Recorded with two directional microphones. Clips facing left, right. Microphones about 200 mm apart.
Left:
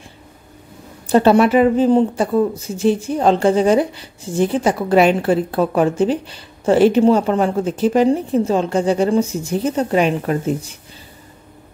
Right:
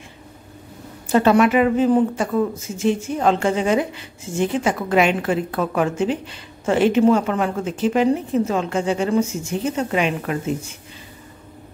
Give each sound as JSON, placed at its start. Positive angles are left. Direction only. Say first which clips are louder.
{"t": 1.0, "sound": "speech", "louder": "left 3 dB", "side_deg": 30}